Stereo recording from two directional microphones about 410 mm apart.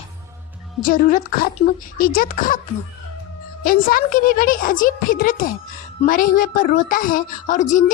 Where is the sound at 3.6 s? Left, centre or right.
Centre.